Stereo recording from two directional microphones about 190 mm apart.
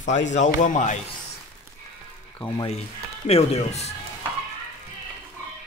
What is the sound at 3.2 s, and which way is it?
Speech, 35° left (ahead or behind).